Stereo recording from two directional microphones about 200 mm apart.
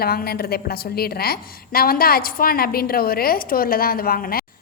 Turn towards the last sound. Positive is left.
turn(degrees=45)  # may be behind; listen again after turning